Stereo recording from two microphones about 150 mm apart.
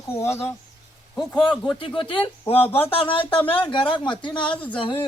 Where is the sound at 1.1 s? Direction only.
Centre (ahead or behind).